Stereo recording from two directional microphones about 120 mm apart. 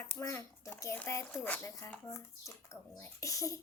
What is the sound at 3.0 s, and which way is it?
Speech, 25° left (ahead or behind).